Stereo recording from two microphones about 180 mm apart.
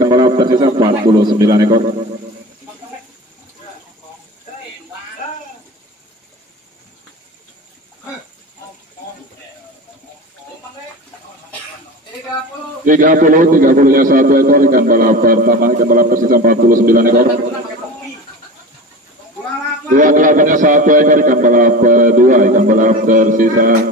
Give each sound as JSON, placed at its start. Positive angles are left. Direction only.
{"t": 0.0, "sound": "a man's voice", "side_deg": -25}
{"t": 12.8, "sound": "a man's voice", "side_deg": -50}
{"t": 19.9, "sound": "a man's voice", "side_deg": -45}